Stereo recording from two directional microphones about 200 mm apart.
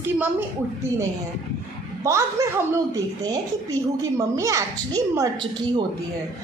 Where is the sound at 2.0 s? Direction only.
15° right (ahead or behind).